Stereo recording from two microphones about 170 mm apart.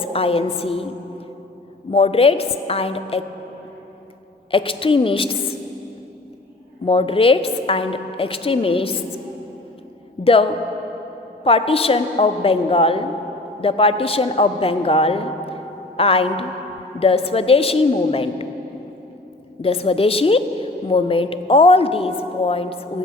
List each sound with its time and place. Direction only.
0.0 s a woman's voice: 35° left (ahead or behind)
1.9 s a woman's voice: 35° left (ahead or behind)
4.5 s a woman's voice: 30° left (ahead or behind)
6.8 s a woman's voice: 35° left (ahead or behind)
10.2 s a sound: 35° left (ahead or behind)
11.4 s a woman's voice: 35° left (ahead or behind)
19.6 s a woman's voice: 35° left (ahead or behind)